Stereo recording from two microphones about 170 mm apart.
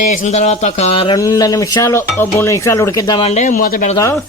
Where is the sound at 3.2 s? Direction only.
40° left (ahead or behind).